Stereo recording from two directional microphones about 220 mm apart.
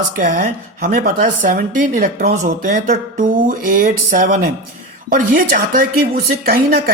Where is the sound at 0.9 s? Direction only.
40° right (ahead or behind).